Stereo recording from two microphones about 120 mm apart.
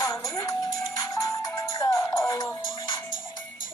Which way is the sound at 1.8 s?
25° left (ahead or behind).